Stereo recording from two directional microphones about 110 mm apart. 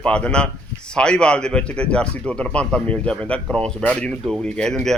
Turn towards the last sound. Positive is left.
turn(degrees=5)  # may be behind; listen again after turning